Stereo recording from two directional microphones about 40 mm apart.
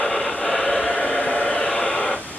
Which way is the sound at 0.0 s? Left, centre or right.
Centre.